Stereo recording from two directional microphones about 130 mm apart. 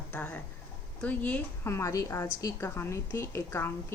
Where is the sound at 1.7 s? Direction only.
20° left (ahead or behind).